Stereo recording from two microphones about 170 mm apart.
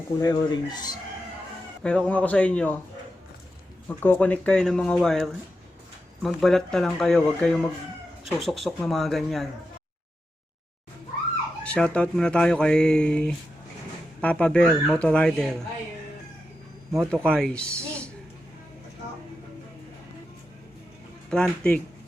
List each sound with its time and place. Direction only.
0.2 s speech: 25° left (ahead or behind)
1.8 s speech: 5° left (ahead or behind)
3.8 s speech: 10° left (ahead or behind)
11.6 s speech: 5° left (ahead or behind)
16.9 s speech: 5° left (ahead or behind)
21.2 s speech: 5° left (ahead or behind)